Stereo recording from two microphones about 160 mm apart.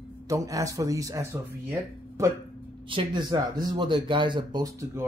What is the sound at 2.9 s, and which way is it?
Speech, 30° right (ahead or behind).